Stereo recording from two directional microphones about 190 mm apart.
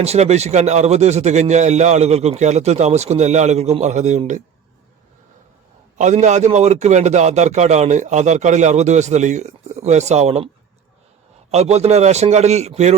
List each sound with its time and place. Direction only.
0.0 s a man's voice: 35° right (ahead or behind)
6.0 s a man's voice: 40° right (ahead or behind)
11.5 s a man's voice: 35° right (ahead or behind)